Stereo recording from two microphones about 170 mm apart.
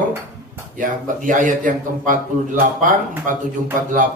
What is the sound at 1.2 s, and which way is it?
A man's voice, 50° right (ahead or behind).